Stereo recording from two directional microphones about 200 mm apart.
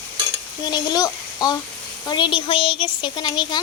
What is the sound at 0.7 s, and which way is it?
Speech, 20° left (ahead or behind).